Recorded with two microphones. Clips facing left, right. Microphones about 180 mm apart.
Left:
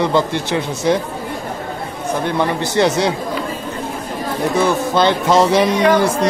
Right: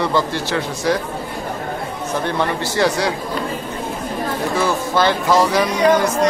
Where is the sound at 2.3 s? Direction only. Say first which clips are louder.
Left 3 dB; 20° left (ahead or behind).